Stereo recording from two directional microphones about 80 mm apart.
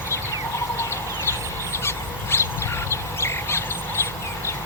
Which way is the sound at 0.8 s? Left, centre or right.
Left.